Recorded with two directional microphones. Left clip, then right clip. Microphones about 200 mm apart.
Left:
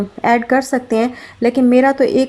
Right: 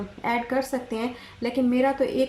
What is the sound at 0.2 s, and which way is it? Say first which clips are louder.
A woman's voice: left 11 dB; 45° left (ahead or behind).